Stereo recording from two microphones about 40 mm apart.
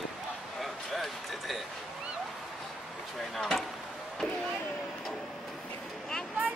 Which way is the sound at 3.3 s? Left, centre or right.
Centre.